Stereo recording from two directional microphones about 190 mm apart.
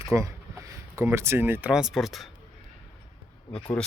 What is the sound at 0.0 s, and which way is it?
Speech, 15° right (ahead or behind).